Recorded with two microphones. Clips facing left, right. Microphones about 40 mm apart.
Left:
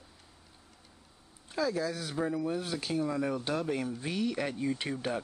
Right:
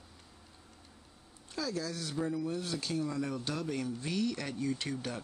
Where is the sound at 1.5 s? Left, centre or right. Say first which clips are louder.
Left 5 dB; centre.